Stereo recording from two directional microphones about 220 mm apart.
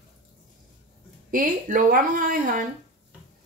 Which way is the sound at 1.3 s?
40° right (ahead or behind).